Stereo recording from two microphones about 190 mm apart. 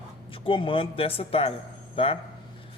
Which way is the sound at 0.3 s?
30° left (ahead or behind).